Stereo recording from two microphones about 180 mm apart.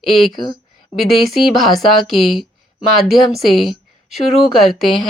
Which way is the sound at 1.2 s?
Centre (ahead or behind).